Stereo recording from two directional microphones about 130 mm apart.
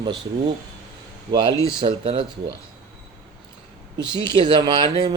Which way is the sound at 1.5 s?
25° left (ahead or behind).